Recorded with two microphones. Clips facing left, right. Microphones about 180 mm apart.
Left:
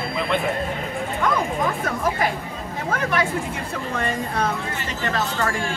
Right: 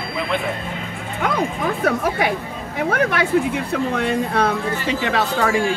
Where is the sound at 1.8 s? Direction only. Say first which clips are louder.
Right 4 dB; 65° right (ahead or behind); by 5.6 s 80° right.